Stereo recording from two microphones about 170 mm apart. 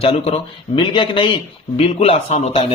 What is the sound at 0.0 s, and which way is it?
Speech, 35° left (ahead or behind).